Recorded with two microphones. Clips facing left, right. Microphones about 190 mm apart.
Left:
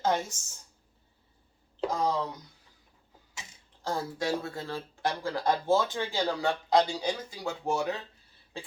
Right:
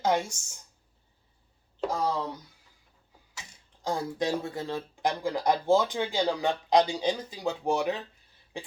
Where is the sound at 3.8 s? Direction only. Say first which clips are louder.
Right 2 dB; 15° right (ahead or behind).